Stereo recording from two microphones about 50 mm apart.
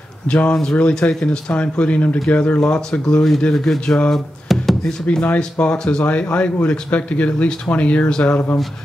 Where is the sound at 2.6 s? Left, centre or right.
Centre.